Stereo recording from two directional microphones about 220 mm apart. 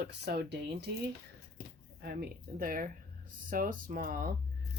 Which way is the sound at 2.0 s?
45° right (ahead or behind).